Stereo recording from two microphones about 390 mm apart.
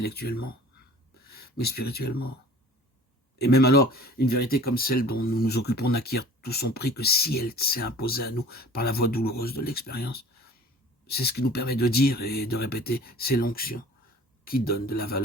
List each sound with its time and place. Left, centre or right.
0.0 s speech: left
3.3 s speech: left